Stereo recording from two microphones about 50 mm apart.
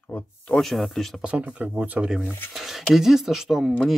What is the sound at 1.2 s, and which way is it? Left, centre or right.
Speech, right.